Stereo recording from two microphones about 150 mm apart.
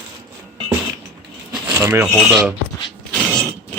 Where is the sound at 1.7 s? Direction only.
15° right (ahead or behind).